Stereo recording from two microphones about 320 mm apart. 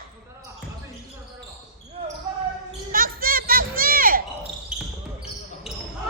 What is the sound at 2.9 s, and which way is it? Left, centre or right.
Children playing, right.